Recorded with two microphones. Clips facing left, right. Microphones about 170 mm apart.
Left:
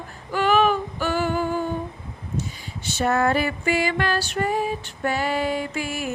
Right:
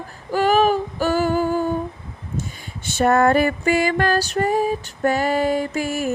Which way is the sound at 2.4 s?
50° right (ahead or behind).